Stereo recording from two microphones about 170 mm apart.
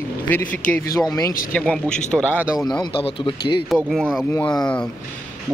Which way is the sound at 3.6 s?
Centre (ahead or behind).